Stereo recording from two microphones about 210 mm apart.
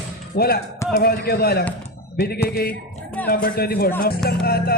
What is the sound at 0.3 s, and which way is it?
Speech, 45° left (ahead or behind).